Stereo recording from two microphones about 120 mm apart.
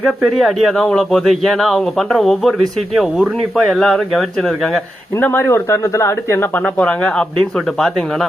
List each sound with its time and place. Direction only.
0.2 s speech: centre (ahead or behind)
5.1 s speech: 20° left (ahead or behind)
6.7 s speech: 10° left (ahead or behind)